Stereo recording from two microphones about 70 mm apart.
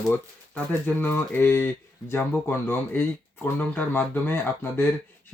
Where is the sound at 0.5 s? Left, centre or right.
Left.